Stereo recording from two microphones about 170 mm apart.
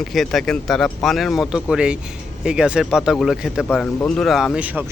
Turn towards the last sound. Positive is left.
turn(degrees=-10)  # may be behind; listen again after turning